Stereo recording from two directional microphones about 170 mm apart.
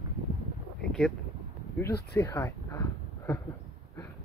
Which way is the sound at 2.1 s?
15° left (ahead or behind).